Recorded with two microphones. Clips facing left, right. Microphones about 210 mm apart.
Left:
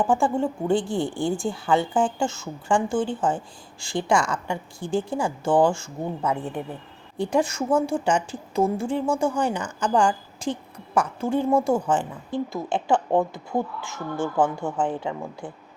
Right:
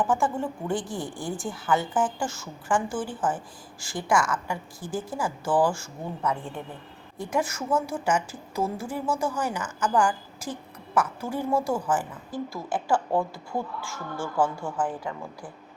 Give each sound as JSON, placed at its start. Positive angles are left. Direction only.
{"t": 0.0, "sound": "a woman's voice", "side_deg": 30}